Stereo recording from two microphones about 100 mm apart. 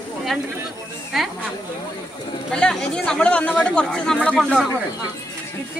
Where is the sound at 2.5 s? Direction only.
10° left (ahead or behind).